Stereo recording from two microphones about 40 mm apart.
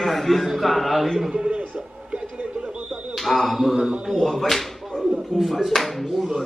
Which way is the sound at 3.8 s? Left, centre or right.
Centre.